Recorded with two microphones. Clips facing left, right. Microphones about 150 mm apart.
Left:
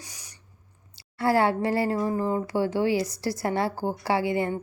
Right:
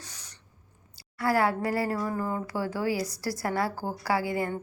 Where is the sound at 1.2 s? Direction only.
25° left (ahead or behind).